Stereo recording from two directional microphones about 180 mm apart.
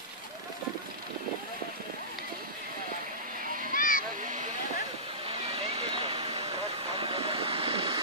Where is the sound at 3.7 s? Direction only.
50° left (ahead or behind).